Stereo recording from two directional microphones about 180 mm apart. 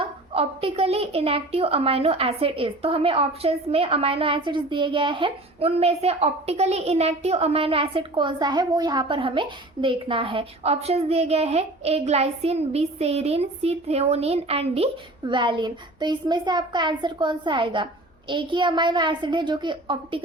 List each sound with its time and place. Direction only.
0.0 s a child's voice: 30° right (ahead or behind)